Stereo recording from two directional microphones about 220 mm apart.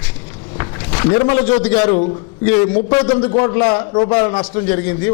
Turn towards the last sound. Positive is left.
turn(degrees=10)  # may be behind; listen again after turning